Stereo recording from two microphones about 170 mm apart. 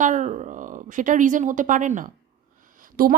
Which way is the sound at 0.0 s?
45° right (ahead or behind).